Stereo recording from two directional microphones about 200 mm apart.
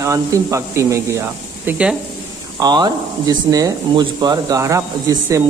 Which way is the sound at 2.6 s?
20° right (ahead or behind).